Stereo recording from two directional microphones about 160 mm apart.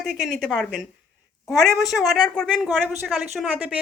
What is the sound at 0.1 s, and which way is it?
A woman's voice, 5° left (ahead or behind).